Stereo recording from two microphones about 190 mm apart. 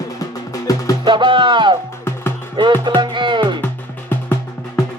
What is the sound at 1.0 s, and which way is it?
Music, 25° right (ahead or behind).